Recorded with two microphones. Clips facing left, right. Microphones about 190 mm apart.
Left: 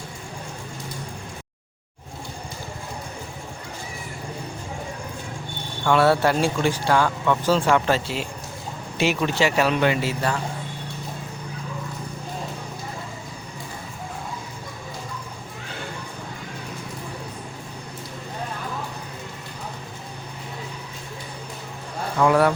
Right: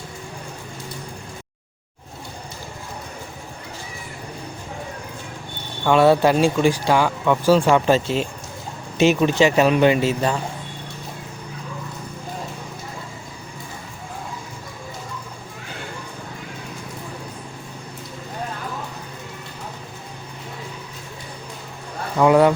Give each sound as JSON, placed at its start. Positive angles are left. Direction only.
{"t": 5.8, "sound": "speech", "side_deg": -20}
{"t": 22.2, "sound": "speech", "side_deg": -20}